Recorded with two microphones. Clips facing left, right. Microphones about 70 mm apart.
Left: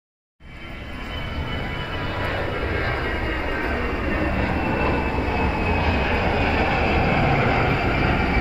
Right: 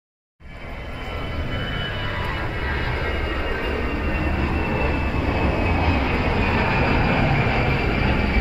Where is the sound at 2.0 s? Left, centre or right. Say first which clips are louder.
Left 1 dB; left.